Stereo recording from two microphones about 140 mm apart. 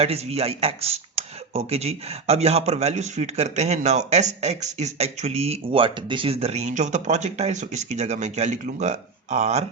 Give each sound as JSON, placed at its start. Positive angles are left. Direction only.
{"t": 0.0, "sound": "speech", "side_deg": -45}